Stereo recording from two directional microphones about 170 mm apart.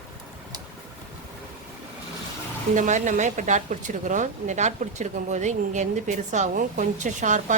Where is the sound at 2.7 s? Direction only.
45° right (ahead or behind).